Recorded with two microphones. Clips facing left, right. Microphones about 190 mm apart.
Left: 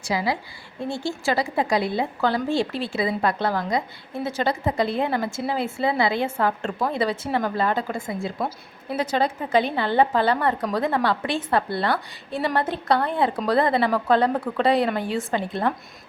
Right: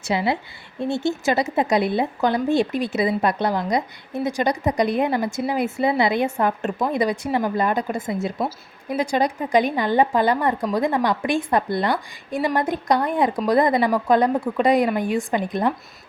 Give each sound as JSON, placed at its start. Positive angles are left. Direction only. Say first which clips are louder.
{"t": 0.1, "sound": "a woman's voice", "louder": "right 3 dB", "side_deg": -25}